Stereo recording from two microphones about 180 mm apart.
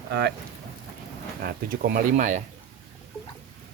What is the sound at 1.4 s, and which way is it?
Speech, 55° right (ahead or behind).